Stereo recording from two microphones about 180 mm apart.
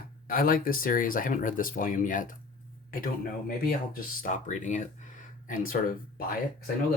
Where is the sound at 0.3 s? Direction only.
50° left (ahead or behind).